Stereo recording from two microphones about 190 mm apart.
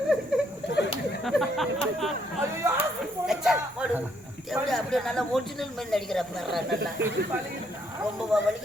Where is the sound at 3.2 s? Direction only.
Centre (ahead or behind).